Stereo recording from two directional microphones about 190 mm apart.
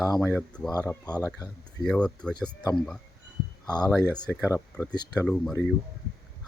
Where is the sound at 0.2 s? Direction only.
10° left (ahead or behind).